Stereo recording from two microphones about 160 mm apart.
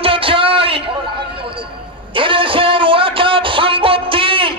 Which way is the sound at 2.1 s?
35° right (ahead or behind).